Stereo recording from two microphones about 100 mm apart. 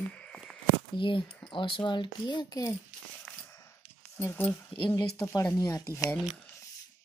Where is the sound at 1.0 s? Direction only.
55° left (ahead or behind).